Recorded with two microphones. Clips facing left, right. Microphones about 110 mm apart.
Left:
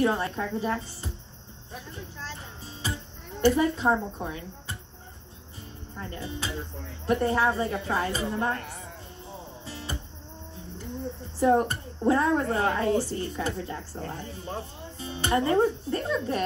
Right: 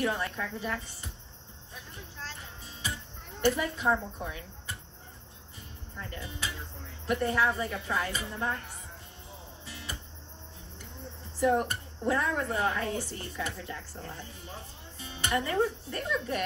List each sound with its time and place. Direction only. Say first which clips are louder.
0.0 s speech: left 6 dB; 30° left (ahead or behind)
2.8 s music: left 4 dB; 35° left (ahead or behind)
3.3 s speech: left 6 dB; 35° left (ahead or behind)
5.9 s speech: left 4 dB; 30° left (ahead or behind)
8.4 s speech: left 3 dB; 55° left (ahead or behind)
9.7 s music: left 5 dB; 30° left (ahead or behind)
11.3 s speech: left 4 dB; 35° left (ahead or behind)